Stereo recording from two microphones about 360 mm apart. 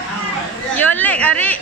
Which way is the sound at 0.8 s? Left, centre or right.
Centre.